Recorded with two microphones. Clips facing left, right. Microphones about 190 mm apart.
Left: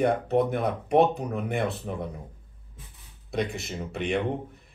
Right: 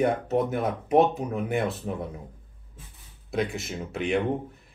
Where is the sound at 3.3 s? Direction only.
Centre (ahead or behind).